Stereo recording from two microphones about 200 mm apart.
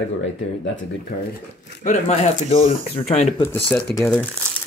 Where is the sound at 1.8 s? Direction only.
35° left (ahead or behind).